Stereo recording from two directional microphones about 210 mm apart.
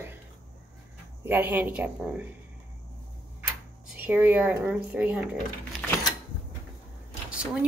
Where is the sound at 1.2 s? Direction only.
10° right (ahead or behind).